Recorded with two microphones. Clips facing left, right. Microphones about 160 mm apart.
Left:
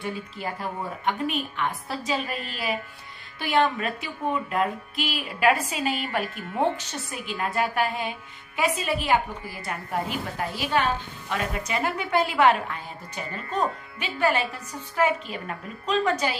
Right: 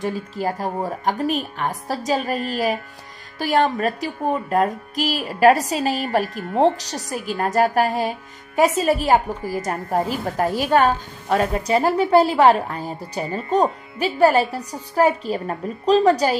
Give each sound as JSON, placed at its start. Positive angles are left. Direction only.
{"t": 0.0, "sound": "speech", "side_deg": -40}